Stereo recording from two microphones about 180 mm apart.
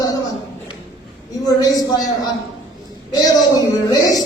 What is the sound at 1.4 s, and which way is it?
Speech, 20° left (ahead or behind).